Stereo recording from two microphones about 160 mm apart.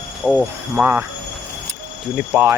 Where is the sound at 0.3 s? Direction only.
Centre (ahead or behind).